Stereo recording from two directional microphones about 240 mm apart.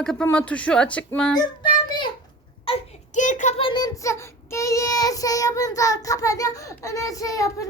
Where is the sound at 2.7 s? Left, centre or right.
Left.